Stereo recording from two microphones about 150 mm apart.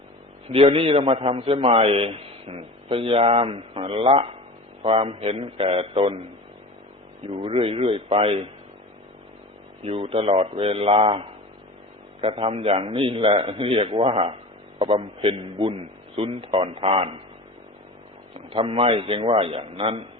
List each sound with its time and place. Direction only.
0.4 s a man's voice: 40° right (ahead or behind)
7.3 s a man's voice: 40° right (ahead or behind)
9.8 s a man's voice: 40° right (ahead or behind)
18.3 s a man's voice: 40° right (ahead or behind)